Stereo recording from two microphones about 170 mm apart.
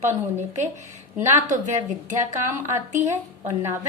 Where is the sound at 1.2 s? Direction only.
15° right (ahead or behind).